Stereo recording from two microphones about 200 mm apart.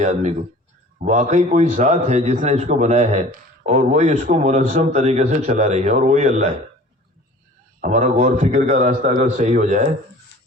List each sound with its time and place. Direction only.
0.0 s a man's voice: 35° right (ahead or behind)
7.8 s a man's voice: 40° right (ahead or behind)